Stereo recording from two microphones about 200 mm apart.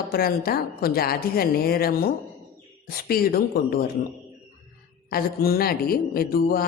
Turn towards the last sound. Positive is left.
turn(degrees=45)  # may be behind; listen again after turning